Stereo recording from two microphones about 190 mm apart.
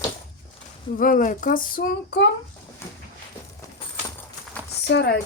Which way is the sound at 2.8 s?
15° left (ahead or behind).